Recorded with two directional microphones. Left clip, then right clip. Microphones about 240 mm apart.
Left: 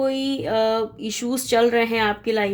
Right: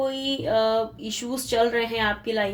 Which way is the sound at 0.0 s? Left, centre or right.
Left.